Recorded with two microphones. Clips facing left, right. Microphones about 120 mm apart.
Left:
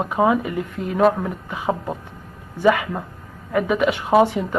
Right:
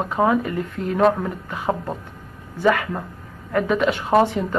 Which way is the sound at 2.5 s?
10° left (ahead or behind).